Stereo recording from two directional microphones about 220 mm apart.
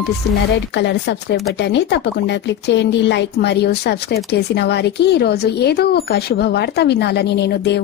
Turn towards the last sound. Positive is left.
turn(degrees=50)  # may be behind; listen again after turning